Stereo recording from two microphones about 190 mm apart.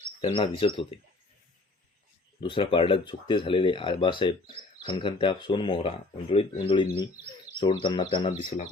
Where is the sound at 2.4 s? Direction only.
25° left (ahead or behind).